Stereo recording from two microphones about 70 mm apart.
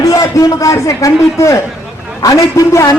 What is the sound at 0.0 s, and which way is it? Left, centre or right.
A man's voice, left.